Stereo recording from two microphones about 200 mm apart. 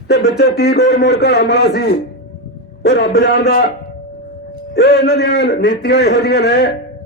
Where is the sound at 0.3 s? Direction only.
55° left (ahead or behind).